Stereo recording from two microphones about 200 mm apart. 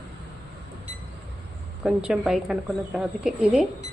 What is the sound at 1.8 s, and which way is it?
A woman's voice, 5° right (ahead or behind).